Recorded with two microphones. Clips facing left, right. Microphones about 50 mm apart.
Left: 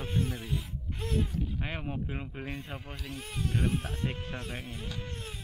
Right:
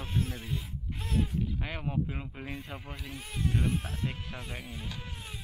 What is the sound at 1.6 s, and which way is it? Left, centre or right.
Speech, centre.